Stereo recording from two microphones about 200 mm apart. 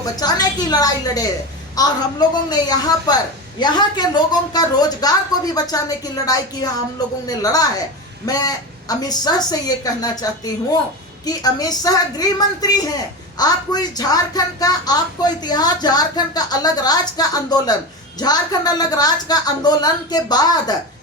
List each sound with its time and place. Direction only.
0.0 s a woman's voice: 20° left (ahead or behind)